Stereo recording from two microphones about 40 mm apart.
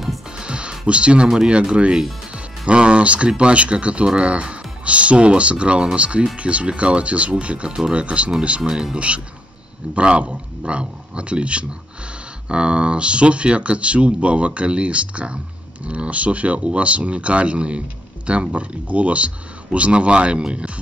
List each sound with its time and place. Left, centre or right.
0.4 s music: right
1.5 s speech: right
8.6 s speech: centre
9.9 s speech: right